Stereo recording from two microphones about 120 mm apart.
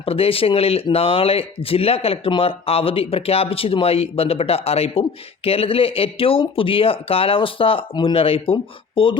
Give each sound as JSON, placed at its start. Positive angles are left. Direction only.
{"t": 0.0, "sound": "speech", "side_deg": 50}